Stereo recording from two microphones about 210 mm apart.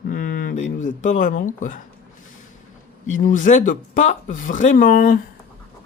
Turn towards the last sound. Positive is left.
turn(degrees=40)  # may be behind; listen again after turning